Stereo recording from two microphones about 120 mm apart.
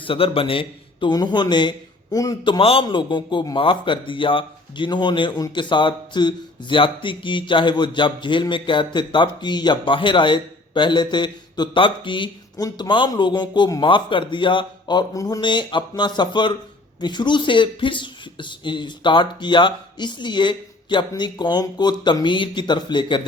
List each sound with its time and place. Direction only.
0.0 s a man's voice: 50° left (ahead or behind)
2.8 s a man's voice: 40° left (ahead or behind)